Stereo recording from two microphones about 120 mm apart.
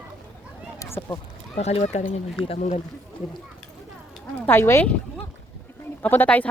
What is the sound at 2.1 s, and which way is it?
Speech, 50° left (ahead or behind).